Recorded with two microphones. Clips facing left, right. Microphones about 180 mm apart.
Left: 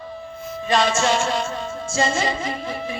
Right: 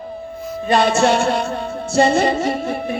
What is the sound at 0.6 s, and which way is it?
Music, 60° right (ahead or behind).